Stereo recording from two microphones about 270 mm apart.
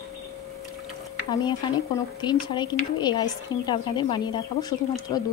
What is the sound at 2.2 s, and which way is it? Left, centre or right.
Speech, centre.